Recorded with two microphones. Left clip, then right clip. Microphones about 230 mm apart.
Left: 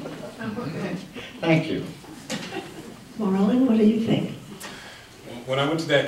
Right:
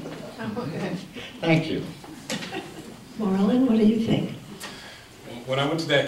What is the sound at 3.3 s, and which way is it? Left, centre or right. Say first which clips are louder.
A woman's voice: left 1 dB; centre.